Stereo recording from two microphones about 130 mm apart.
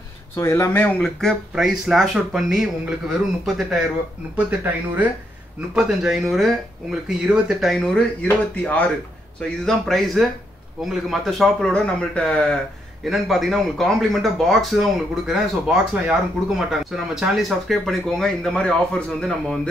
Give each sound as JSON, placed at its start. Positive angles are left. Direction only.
{"t": 0.4, "sound": "speech", "side_deg": 20}